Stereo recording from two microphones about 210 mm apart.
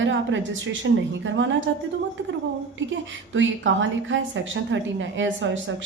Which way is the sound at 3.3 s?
65° right (ahead or behind).